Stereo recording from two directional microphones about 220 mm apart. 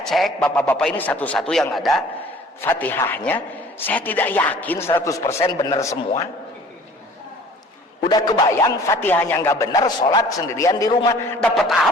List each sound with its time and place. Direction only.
0.0 s a man's voice: centre (ahead or behind)
8.1 s a man's voice: 20° left (ahead or behind)
11.5 s a man's voice: centre (ahead or behind)